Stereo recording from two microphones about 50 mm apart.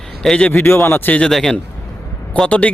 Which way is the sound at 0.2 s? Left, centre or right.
Centre.